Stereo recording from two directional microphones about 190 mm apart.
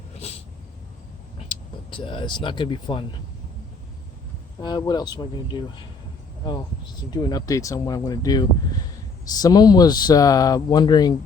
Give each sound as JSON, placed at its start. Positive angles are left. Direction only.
{"t": 0.1, "sound": "a sound", "side_deg": 35}
{"t": 1.5, "sound": "speech", "side_deg": 25}
{"t": 4.6, "sound": "speech", "side_deg": 20}
{"t": 7.1, "sound": "speech", "side_deg": 20}